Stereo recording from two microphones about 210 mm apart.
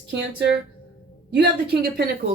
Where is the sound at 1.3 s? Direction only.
50° right (ahead or behind).